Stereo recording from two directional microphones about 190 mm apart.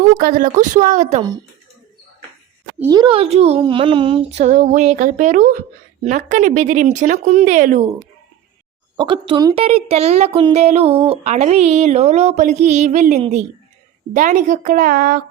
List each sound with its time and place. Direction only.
0.1 s speech: 50° right (ahead or behind)
2.9 s speech: 25° right (ahead or behind); by 7.9 s 40° right (ahead or behind)
9.0 s speech: 30° right (ahead or behind)
9.6 s speech: 30° right (ahead or behind); by 15.2 s 50° right (ahead or behind)